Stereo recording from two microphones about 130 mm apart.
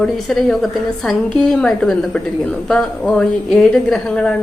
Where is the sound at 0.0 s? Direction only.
5° left (ahead or behind).